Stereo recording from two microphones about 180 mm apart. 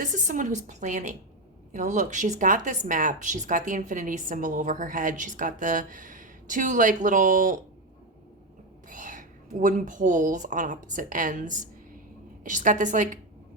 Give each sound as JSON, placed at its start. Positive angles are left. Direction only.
{"t": 0.0, "sound": "speech", "side_deg": -45}
{"t": 8.9, "sound": "a woman's voice", "side_deg": -45}